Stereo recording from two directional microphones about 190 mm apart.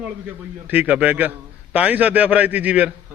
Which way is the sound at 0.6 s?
10° right (ahead or behind).